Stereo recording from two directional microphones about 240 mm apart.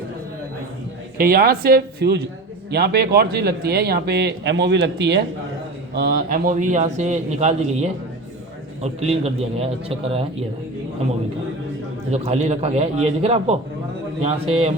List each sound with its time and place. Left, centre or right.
1.2 s a man's voice: right
12.1 s a man's voice: right